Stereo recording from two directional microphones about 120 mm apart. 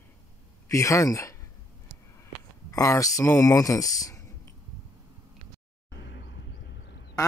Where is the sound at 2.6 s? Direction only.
25° left (ahead or behind).